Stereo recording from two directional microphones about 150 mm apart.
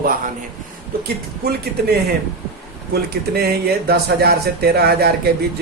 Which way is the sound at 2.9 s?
90° right.